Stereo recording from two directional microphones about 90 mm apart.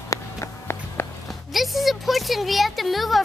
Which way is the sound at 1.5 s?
Centre (ahead or behind).